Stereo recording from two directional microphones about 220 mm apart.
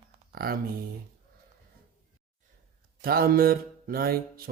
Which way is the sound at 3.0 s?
45° right (ahead or behind).